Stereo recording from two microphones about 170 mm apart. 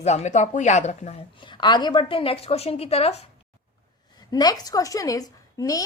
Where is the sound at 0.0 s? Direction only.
40° left (ahead or behind).